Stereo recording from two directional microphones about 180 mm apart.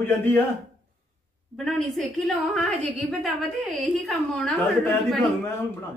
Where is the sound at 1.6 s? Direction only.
Centre (ahead or behind).